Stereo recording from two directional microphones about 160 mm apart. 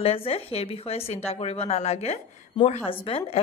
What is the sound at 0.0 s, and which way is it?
A woman's voice, 35° left (ahead or behind).